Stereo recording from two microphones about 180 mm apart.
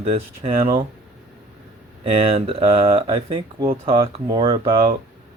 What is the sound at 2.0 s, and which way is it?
Speech, 30° right (ahead or behind).